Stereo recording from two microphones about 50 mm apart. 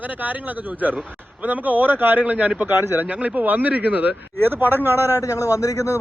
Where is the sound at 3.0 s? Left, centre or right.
Right.